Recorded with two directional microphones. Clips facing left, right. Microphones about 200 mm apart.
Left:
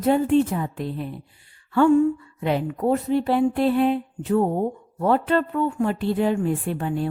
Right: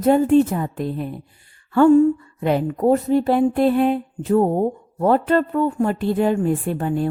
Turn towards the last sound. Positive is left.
turn(degrees=-45)  # may be behind; listen again after turning